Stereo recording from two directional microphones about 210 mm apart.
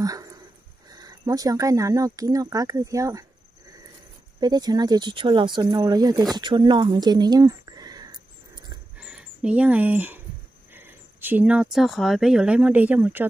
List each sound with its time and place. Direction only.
0.0 s dog: 15° right (ahead or behind)
0.8 s speech: 15° right (ahead or behind)
4.4 s speech: 20° right (ahead or behind)
8.9 s a sound: 5° right (ahead or behind)
10.7 s speech: 10° right (ahead or behind)